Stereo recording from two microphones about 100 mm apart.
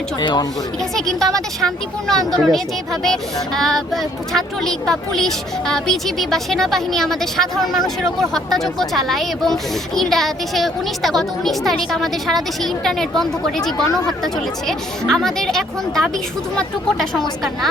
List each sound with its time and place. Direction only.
0.2 s speech: 45° left (ahead or behind)
0.9 s speech: 5° left (ahead or behind)